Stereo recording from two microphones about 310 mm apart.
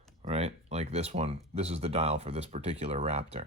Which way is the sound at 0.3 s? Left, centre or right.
Centre.